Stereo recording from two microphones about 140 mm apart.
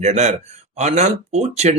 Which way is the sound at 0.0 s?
55° right (ahead or behind).